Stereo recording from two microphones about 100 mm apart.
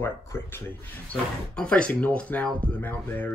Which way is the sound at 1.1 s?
10° left (ahead or behind).